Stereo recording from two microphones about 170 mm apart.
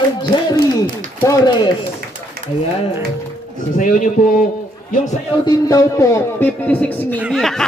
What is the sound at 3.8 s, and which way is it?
Speech, 50° left (ahead or behind).